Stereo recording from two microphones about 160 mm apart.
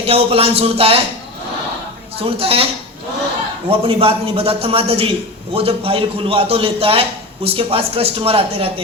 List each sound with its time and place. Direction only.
0.0 s a man's voice: 40° right (ahead or behind)
2.1 s a man's voice: 35° right (ahead or behind)
3.7 s a man's voice: 35° right (ahead or behind)